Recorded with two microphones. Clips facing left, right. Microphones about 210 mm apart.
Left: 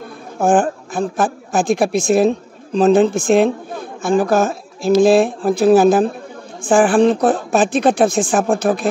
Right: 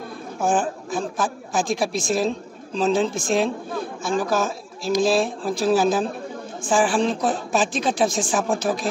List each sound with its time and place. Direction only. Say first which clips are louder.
0.6 s a woman's voice: left 7 dB; 60° left (ahead or behind)